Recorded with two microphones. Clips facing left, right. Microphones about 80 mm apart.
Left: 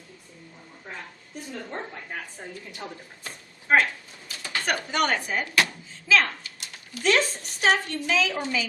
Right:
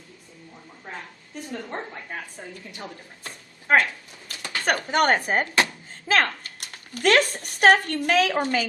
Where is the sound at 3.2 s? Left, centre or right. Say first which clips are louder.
Even; right.